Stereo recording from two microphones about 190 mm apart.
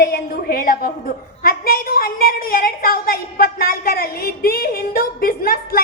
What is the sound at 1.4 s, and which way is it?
A woman's voice, 50° left (ahead or behind).